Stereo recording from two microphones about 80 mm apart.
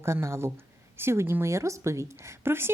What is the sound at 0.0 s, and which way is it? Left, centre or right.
Speech, right.